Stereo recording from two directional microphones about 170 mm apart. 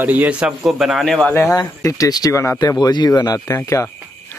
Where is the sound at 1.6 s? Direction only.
20° left (ahead or behind).